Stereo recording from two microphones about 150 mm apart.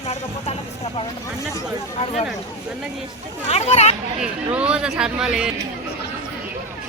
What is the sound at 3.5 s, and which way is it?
Speech, 45° left (ahead or behind).